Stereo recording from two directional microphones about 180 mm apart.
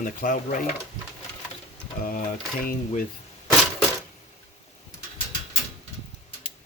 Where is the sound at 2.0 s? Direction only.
50° left (ahead or behind).